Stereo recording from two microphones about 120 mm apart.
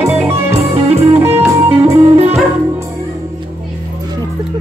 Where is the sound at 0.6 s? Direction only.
60° right (ahead or behind).